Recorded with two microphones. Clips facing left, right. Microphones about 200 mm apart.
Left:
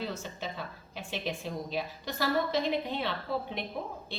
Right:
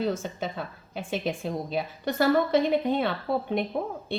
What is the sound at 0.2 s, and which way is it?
A woman's voice, 50° right (ahead or behind).